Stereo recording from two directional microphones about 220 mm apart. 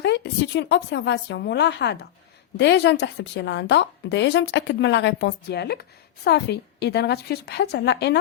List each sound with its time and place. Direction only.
0.0 s a woman's voice: 50° left (ahead or behind)